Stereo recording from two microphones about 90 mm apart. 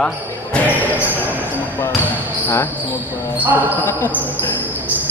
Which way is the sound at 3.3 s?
20° right (ahead or behind).